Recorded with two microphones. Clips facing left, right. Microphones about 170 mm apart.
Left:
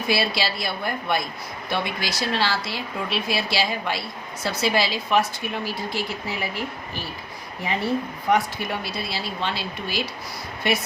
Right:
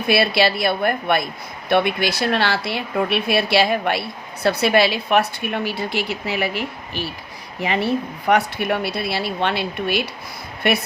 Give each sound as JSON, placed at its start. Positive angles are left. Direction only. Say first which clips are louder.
{"t": 0.1, "sound": "a woman's voice", "louder": "right 7 dB", "side_deg": -60}
{"t": 8.3, "sound": "a woman's voice", "louder": "right 4 dB", "side_deg": -65}